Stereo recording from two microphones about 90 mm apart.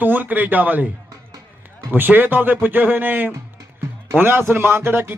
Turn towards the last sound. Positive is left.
turn(degrees=-25)  # may be behind; listen again after turning